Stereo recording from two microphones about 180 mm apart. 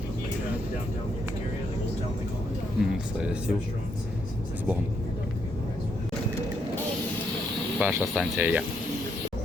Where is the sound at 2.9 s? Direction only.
5° right (ahead or behind).